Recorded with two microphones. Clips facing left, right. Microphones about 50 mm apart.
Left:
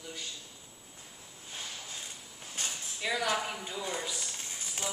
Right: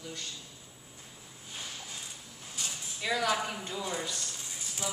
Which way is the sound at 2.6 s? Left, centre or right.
Left.